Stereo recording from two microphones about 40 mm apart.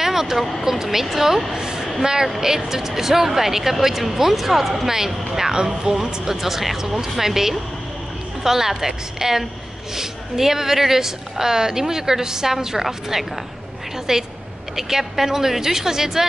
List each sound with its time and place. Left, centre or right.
0.0 s vehicle: centre
0.7 s a woman's voice: centre